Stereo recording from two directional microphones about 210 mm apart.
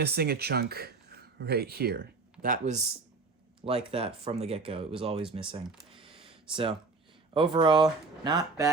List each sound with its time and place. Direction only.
0.0 s speech: 50° right (ahead or behind)
2.4 s speech: 35° right (ahead or behind)
6.0 s a sound: 25° right (ahead or behind)
7.3 s speech: 20° right (ahead or behind)